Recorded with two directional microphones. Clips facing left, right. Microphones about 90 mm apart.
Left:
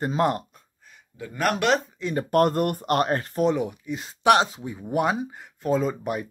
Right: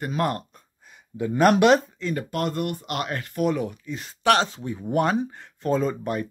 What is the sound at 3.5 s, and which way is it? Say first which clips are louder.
Speech: left 1 dB; 15° left (ahead or behind).